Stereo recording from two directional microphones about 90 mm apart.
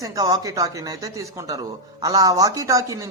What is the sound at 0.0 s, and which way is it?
A man's voice, 45° right (ahead or behind).